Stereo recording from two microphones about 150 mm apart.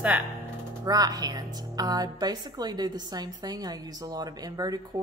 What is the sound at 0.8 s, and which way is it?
A woman's voice, 25° right (ahead or behind).